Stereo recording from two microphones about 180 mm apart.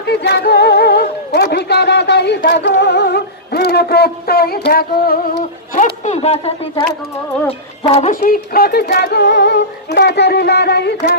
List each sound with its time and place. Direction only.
0.0 s speech: 65° left (ahead or behind); by 6.5 s 35° left (ahead or behind)
7.9 s speech: 40° left (ahead or behind)
8.2 s a sound: 60° left (ahead or behind)